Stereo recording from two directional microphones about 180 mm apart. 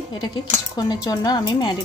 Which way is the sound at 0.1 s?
25° left (ahead or behind).